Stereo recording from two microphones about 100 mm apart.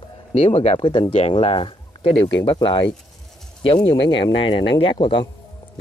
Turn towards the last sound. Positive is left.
turn(degrees=55)  # may be behind; listen again after turning